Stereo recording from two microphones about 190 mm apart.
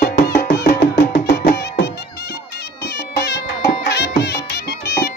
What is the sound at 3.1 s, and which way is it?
Music, 65° left (ahead or behind).